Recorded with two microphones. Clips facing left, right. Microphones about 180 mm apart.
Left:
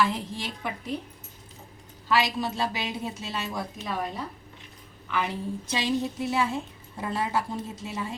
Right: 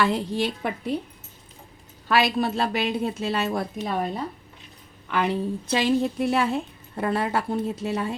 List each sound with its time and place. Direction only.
0.0 s a woman's voice: 70° right (ahead or behind)
2.0 s speech: 60° right (ahead or behind)
5.1 s speech: 60° right (ahead or behind)